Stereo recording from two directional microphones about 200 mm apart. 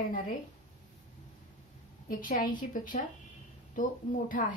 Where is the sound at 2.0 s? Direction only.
45° left (ahead or behind).